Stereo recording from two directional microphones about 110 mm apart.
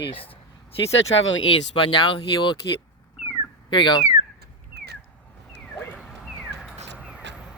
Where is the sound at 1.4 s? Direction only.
50° left (ahead or behind).